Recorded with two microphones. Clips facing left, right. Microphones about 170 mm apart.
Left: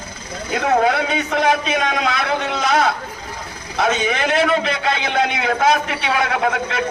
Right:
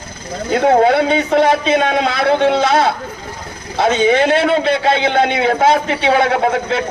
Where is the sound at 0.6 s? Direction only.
30° right (ahead or behind).